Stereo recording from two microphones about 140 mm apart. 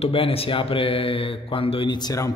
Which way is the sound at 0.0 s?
40° left (ahead or behind).